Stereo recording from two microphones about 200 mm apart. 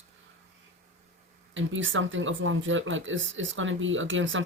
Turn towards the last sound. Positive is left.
turn(degrees=-70)  # may be behind; listen again after turning